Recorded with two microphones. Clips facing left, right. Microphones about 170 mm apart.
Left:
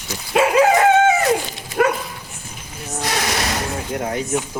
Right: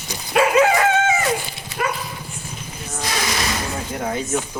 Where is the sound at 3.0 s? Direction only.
65° left (ahead or behind).